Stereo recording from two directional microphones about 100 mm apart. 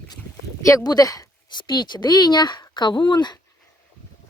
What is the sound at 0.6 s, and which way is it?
Speech, 35° left (ahead or behind).